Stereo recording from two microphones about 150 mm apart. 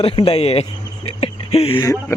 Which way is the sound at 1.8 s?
20° left (ahead or behind).